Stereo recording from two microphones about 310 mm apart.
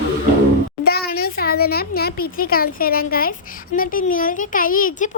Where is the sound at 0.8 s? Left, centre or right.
Left.